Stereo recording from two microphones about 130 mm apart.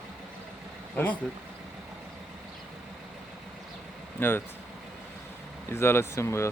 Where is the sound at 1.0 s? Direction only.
10° left (ahead or behind).